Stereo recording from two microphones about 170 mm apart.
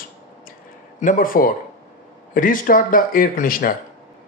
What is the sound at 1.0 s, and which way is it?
A man's voice, 50° left (ahead or behind).